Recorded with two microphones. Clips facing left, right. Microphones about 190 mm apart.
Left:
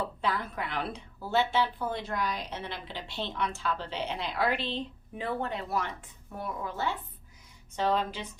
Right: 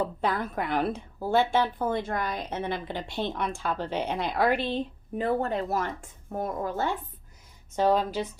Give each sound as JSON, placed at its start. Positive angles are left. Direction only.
{"t": 0.2, "sound": "a woman's voice", "side_deg": -50}